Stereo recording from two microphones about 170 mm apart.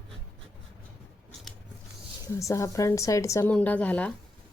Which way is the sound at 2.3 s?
15° left (ahead or behind).